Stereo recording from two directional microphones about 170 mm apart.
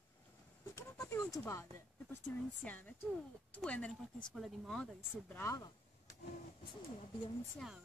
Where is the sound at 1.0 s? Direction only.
20° left (ahead or behind).